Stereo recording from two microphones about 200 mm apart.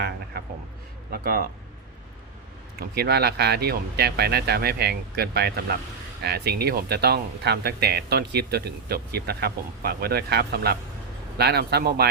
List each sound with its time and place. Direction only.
0.4 s a sound: 50° right (ahead or behind)
1.1 s speech: 50° right (ahead or behind)
2.9 s speech: 50° right (ahead or behind)